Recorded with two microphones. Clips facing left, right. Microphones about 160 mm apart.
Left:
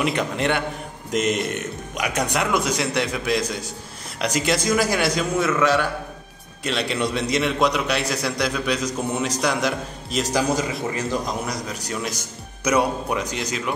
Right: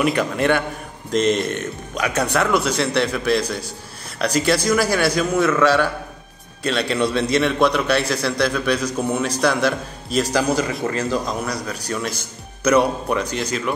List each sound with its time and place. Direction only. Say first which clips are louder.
0.0 s a man's voice: right 4 dB; 20° left (ahead or behind)
5.4 s a man's voice: right 4 dB; 5° left (ahead or behind)
6.6 s a man's voice: right 4 dB; 20° left (ahead or behind)